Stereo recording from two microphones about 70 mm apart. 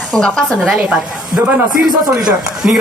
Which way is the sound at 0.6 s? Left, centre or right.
Centre.